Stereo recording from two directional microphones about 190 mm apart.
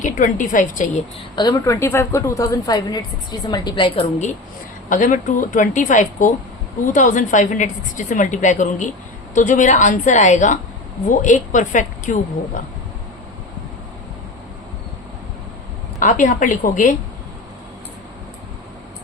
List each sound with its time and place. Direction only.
0.0 s a woman's voice: 40° left (ahead or behind)
1.4 s a woman's voice: 20° left (ahead or behind)
4.9 s a woman's voice: 45° left (ahead or behind)
16.0 s a woman's voice: 40° left (ahead or behind)